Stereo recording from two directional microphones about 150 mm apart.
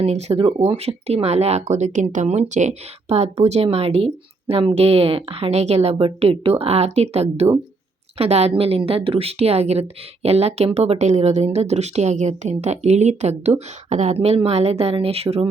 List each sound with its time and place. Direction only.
0.0 s a woman's voice: 45° right (ahead or behind)